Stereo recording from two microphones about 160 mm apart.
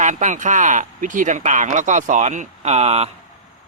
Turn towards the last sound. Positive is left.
turn(degrees=-40)  # may be behind; listen again after turning